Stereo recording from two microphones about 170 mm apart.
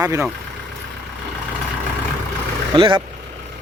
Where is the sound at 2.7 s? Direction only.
30° right (ahead or behind).